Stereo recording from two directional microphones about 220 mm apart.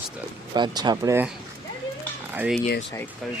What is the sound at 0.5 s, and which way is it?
Speech, 20° right (ahead or behind).